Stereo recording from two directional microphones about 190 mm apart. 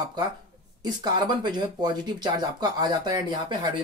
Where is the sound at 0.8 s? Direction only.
20° right (ahead or behind).